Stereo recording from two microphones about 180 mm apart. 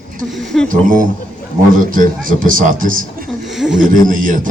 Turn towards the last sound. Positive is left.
turn(degrees=-50)  # may be behind; listen again after turning